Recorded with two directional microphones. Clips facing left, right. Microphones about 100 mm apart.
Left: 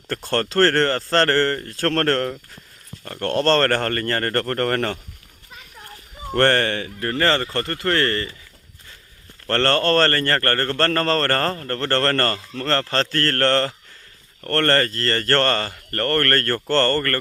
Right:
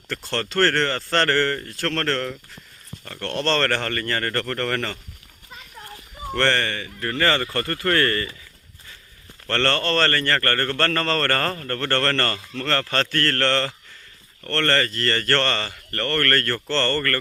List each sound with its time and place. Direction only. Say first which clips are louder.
0.1 s a man's voice: left 4 dB; 45° left (ahead or behind)
6.3 s speech: left 4 dB; 50° left (ahead or behind)
7.0 s speech: left 1 dB; 30° left (ahead or behind)
9.5 s a man's voice: left 4 dB; 40° left (ahead or behind)